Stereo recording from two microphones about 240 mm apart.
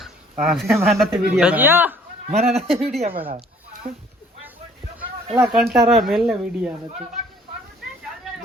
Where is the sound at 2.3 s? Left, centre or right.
Right.